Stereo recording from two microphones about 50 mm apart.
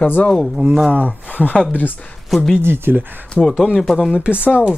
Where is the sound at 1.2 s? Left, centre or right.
Left.